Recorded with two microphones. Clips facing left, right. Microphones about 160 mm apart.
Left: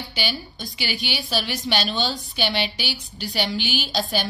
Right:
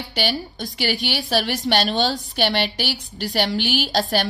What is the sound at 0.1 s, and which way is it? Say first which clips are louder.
A woman's voice: right 7 dB; 70° right (ahead or behind).